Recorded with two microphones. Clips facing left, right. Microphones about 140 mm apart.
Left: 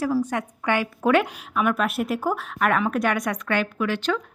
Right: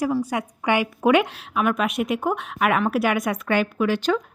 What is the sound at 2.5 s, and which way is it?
A woman's voice, 5° right (ahead or behind).